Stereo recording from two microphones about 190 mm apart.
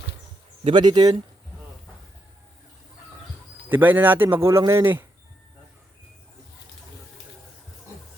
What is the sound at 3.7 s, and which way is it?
Speech, 10° right (ahead or behind).